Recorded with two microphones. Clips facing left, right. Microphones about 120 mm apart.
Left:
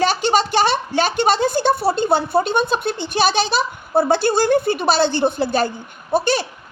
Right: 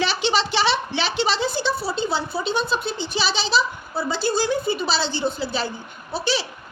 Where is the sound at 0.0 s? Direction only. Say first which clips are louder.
Left 5 dB; 45° left (ahead or behind).